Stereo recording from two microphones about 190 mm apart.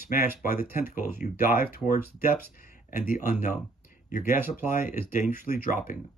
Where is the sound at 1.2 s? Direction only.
50° left (ahead or behind).